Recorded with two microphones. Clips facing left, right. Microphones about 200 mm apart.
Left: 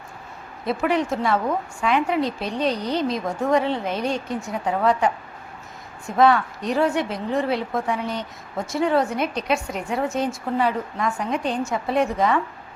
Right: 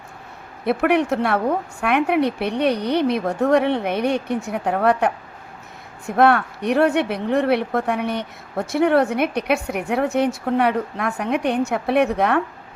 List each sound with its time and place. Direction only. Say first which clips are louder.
0.6 s a woman's voice: right 4 dB; 60° right (ahead or behind)